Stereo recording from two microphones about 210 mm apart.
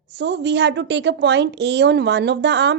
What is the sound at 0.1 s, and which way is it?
A woman's voice, 55° right (ahead or behind).